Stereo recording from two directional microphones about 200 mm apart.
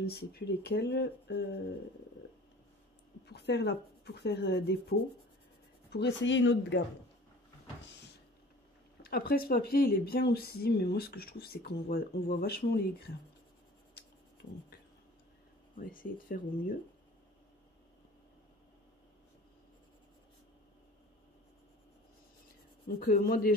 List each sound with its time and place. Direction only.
0.0 s speech: 50° left (ahead or behind)
3.3 s speech: 55° left (ahead or behind)
9.0 s speech: 50° left (ahead or behind)
15.7 s speech: 45° left (ahead or behind)
22.8 s speech: 45° left (ahead or behind)